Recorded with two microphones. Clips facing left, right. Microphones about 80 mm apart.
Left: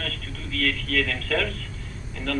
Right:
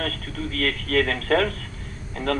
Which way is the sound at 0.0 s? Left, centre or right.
Right.